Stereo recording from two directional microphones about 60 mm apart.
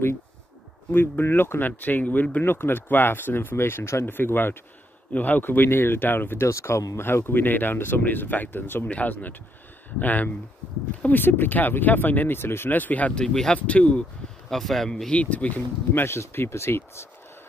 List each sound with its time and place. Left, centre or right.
0.9 s speech: left
4.0 s speech: left
8.8 s speech: left
12.4 s speech: left
13.2 s speech: centre
13.6 s speech: left
14.5 s speech: centre
15.0 s speech: left
16.2 s speech: left